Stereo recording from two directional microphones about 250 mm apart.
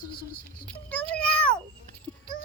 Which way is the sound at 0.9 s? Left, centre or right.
Centre.